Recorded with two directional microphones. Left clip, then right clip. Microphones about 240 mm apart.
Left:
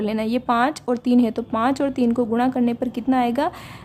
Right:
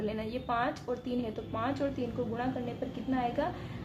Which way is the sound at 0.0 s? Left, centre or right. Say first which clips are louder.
Left 12 dB; left.